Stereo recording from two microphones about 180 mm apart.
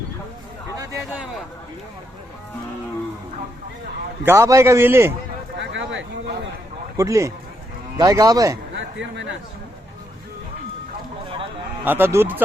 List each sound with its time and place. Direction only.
4.2 s a man's voice: 15° right (ahead or behind)
5.5 s a sound: 90° right
6.9 s a man's voice: 15° right (ahead or behind)
8.7 s a man's voice: 90° right
11.9 s a man's voice: 10° right (ahead or behind)